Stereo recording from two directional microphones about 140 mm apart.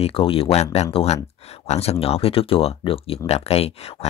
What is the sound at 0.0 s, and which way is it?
Speech, 40° left (ahead or behind).